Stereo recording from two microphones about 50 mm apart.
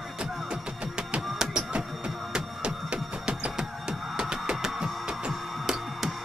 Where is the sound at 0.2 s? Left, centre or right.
Centre.